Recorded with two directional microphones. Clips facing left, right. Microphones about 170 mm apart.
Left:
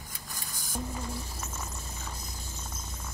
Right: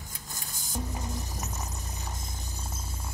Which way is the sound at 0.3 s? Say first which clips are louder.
Even; 20° right (ahead or behind).